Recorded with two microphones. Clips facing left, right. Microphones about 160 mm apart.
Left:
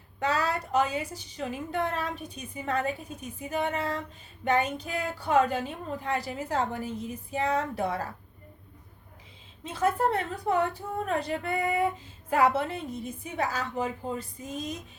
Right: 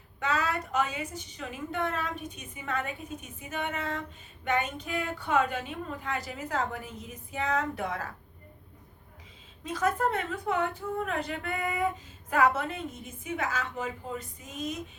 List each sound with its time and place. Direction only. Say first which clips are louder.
0.2 s a woman's voice: left 2 dB; 35° left (ahead or behind)
9.6 s a woman's voice: left 2 dB; 30° left (ahead or behind)